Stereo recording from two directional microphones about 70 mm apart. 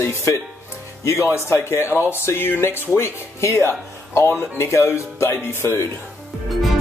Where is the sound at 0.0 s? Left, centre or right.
Left.